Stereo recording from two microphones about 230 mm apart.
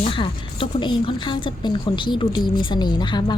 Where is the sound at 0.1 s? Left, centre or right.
Left.